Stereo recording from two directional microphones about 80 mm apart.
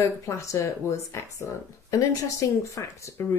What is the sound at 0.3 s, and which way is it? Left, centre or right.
Speech, left.